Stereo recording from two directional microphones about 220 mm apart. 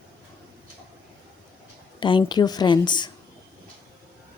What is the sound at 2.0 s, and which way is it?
Speech, 20° left (ahead or behind).